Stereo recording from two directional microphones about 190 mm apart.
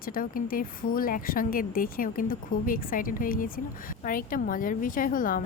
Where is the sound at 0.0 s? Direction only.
50° left (ahead or behind).